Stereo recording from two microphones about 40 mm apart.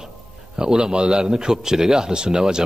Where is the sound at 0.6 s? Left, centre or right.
Centre.